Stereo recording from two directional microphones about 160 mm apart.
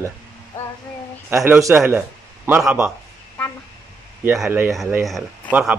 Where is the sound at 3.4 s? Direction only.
10° left (ahead or behind).